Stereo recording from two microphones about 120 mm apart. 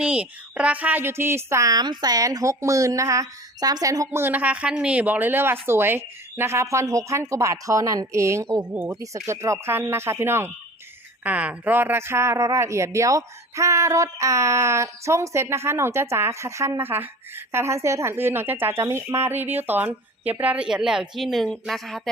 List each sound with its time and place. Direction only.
0.0 s speech: 10° right (ahead or behind)
8.6 s speech: 10° right (ahead or behind)
8.9 s speech: 25° right (ahead or behind); by 22.1 s centre (ahead or behind)